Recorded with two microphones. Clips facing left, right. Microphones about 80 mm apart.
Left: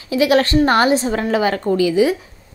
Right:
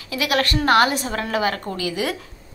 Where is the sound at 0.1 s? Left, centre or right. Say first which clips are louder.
Left 7 dB; left.